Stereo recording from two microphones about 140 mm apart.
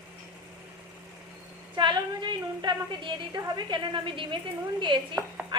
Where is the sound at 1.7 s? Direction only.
35° right (ahead or behind).